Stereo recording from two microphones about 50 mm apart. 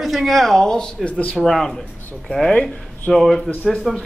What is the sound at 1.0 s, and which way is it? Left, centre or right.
Speech, left.